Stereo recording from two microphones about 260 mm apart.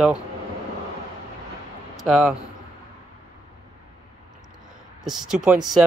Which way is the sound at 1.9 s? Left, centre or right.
Centre.